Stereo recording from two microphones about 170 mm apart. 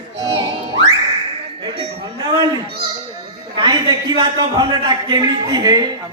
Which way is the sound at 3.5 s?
25° right (ahead or behind).